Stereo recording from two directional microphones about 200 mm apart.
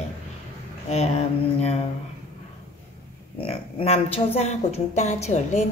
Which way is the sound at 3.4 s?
30° left (ahead or behind).